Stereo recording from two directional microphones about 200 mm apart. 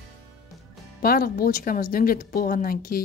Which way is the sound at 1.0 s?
45° left (ahead or behind).